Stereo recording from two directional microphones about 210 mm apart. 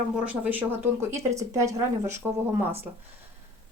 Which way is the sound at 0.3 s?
10° right (ahead or behind).